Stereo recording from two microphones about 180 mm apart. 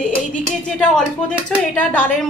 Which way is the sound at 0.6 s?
5° left (ahead or behind).